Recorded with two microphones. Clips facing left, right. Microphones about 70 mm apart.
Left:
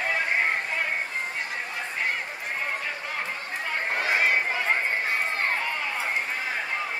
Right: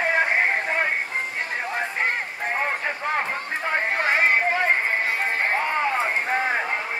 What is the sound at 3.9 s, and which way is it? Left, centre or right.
Run, right.